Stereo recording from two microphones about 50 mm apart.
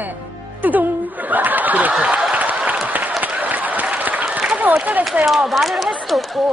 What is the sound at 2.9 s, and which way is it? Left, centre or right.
Applause, right.